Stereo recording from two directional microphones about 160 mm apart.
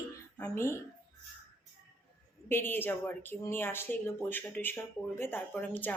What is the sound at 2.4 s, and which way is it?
Speech, 15° left (ahead or behind).